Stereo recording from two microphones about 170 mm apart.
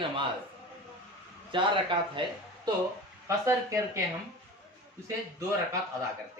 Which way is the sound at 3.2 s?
15° right (ahead or behind).